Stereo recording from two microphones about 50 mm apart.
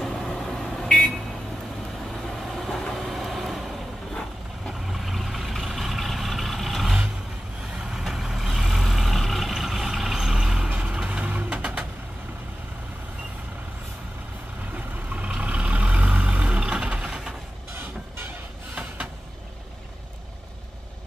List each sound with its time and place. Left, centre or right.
0.0 s vehicle: centre
2.5 s train: centre
2.9 s vehicle: centre
11.1 s vehicle: right
15.1 s vehicle: right